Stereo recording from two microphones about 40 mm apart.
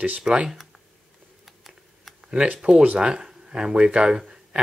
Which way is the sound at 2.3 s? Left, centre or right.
Right.